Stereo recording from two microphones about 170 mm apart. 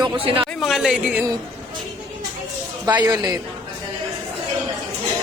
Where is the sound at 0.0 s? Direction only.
25° right (ahead or behind).